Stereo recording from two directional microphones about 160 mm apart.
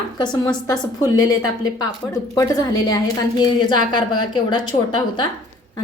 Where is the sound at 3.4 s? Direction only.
30° left (ahead or behind).